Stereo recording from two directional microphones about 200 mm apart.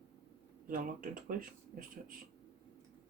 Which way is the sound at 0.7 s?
45° right (ahead or behind).